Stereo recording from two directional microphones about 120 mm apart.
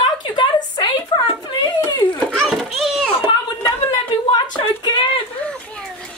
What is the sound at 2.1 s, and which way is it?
Children playing, centre (ahead or behind).